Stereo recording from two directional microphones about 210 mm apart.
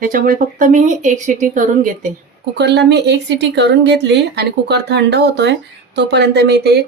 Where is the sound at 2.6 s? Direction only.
55° right (ahead or behind).